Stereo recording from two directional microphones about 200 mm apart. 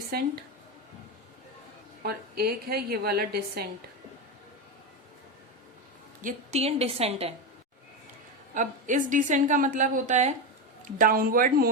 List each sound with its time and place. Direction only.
0.1 s a woman's voice: 50° right (ahead or behind)
2.0 s a woman's voice: 50° right (ahead or behind)
6.2 s a woman's voice: 30° right (ahead or behind)
8.5 s a woman's voice: 40° right (ahead or behind)